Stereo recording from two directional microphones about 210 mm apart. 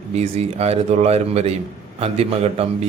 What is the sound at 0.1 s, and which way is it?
A man's voice, 30° right (ahead or behind).